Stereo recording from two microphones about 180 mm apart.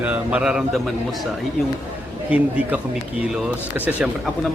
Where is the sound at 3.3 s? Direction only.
5° right (ahead or behind).